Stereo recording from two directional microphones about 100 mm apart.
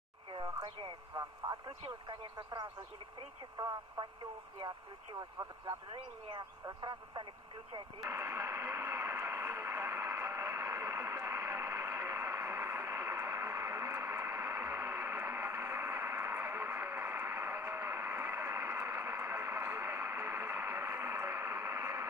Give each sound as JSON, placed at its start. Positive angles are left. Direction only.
{"t": 1.1, "sound": "speech", "side_deg": -40}
{"t": 5.1, "sound": "speech", "side_deg": -35}
{"t": 6.8, "sound": "speech", "side_deg": -50}
{"t": 8.0, "sound": "radio", "side_deg": -25}